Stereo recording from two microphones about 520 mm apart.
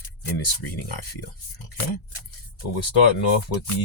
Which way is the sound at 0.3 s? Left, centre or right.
Left.